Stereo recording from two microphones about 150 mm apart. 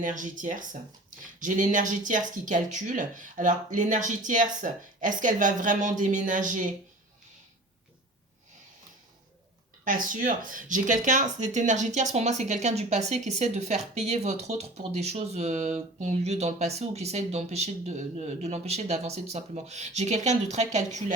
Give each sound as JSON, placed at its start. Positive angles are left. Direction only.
{"t": 0.0, "sound": "speech", "side_deg": -60}
{"t": 9.8, "sound": "speech", "side_deg": -65}